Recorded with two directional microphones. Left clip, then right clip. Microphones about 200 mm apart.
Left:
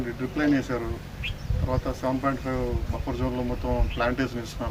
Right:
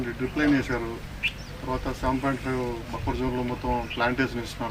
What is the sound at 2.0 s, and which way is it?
Speech, 15° left (ahead or behind).